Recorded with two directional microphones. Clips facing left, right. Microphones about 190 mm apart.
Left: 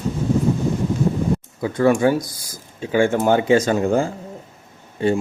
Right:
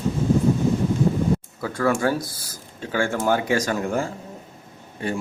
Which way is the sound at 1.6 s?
20° left (ahead or behind).